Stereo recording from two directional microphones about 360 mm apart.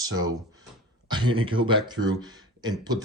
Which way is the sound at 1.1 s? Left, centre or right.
Centre.